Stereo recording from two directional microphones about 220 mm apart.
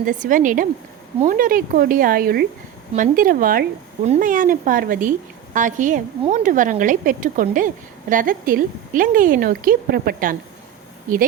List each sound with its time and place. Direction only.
0.0 s a woman's voice: 35° right (ahead or behind)